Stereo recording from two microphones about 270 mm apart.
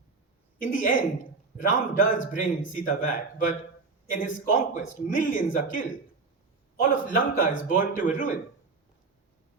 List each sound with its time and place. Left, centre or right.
0.6 s a man's voice: left
6.9 s a man's voice: left